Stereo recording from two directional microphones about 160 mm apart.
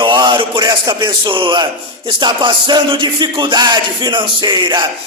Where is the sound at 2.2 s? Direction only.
30° right (ahead or behind).